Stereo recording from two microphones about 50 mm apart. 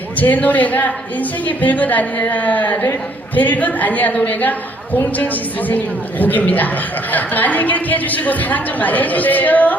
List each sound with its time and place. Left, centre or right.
0.2 s a woman's voice: left